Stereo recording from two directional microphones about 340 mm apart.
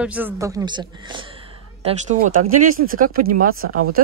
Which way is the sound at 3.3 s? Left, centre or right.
Right.